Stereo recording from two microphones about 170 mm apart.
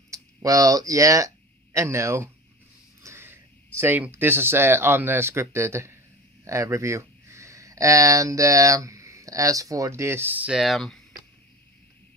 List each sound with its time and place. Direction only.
0.1 s speech: 20° right (ahead or behind)
3.0 s a sound: 15° right (ahead or behind)
3.8 s speech: 10° right (ahead or behind)